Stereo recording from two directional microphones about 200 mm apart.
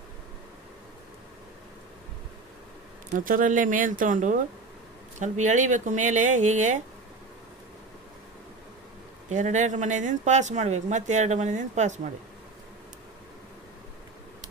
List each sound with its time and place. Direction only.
3.3 s speech: 40° right (ahead or behind)
9.3 s speech: 35° right (ahead or behind)